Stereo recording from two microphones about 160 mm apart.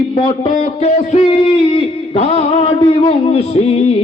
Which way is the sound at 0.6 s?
45° left (ahead or behind).